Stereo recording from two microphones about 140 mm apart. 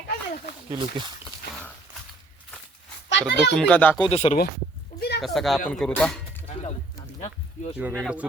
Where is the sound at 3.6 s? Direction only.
10° left (ahead or behind).